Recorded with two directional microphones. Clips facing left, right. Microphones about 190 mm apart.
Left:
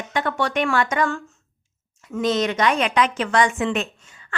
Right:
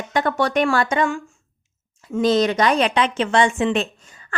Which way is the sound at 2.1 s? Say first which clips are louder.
Right 4 dB; 35° right (ahead or behind).